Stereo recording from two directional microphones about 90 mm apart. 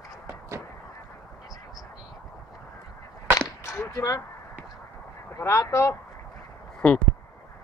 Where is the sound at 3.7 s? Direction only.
35° left (ahead or behind).